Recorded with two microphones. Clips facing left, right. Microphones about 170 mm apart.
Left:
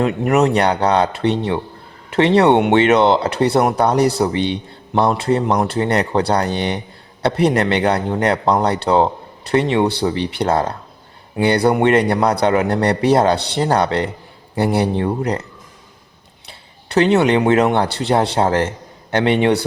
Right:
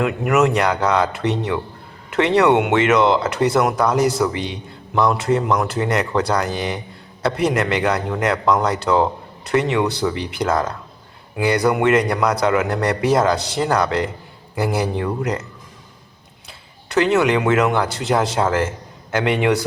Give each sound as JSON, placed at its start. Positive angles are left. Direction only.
{"t": 0.0, "sound": "a man's voice", "side_deg": 35}
{"t": 16.5, "sound": "a man's voice", "side_deg": 30}